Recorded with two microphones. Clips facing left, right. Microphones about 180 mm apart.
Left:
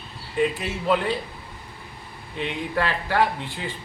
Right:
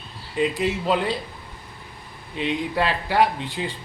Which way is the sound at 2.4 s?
15° right (ahead or behind).